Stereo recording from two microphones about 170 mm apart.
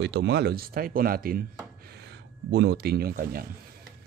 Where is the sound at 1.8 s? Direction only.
80° right; by 3.4 s 65° right (ahead or behind).